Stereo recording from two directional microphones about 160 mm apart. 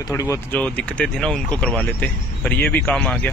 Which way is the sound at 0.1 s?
15° left (ahead or behind).